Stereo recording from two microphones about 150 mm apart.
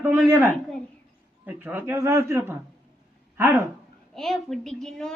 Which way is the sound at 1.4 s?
15° right (ahead or behind).